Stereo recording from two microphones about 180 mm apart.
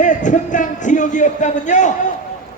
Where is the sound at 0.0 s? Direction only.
45° left (ahead or behind).